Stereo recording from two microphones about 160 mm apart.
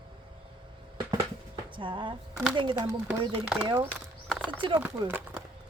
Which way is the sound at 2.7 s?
15° right (ahead or behind).